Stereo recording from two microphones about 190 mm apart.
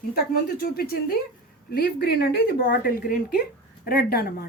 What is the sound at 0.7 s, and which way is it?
Speech, 55° left (ahead or behind).